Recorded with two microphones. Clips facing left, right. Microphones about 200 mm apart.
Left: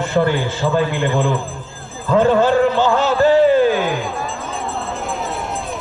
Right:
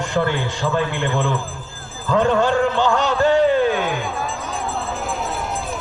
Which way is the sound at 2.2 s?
5° left (ahead or behind).